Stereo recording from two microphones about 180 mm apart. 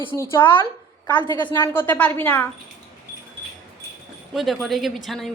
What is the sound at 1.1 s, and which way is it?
A woman's voice, 10° left (ahead or behind).